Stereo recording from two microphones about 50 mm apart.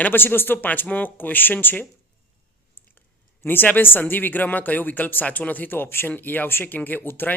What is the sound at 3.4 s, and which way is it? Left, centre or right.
A man's voice, left.